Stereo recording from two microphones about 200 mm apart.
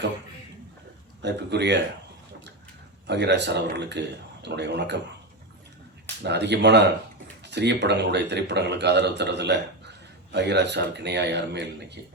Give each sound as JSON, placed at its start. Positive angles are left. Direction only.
{"t": 1.2, "sound": "a man's voice", "side_deg": -60}
{"t": 3.1, "sound": "a man's voice", "side_deg": -60}
{"t": 6.2, "sound": "a man's voice", "side_deg": -60}